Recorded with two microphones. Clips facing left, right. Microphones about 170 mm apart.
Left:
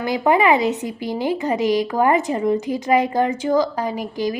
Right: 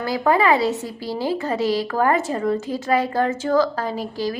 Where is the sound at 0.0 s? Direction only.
20° left (ahead or behind).